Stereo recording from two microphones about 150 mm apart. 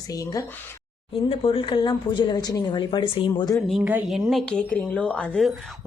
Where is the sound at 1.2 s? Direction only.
40° left (ahead or behind).